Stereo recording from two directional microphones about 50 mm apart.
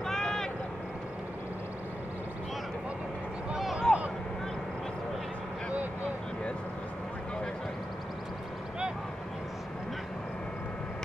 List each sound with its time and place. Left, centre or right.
0.0 s vehicle: centre
3.9 s vehicle: centre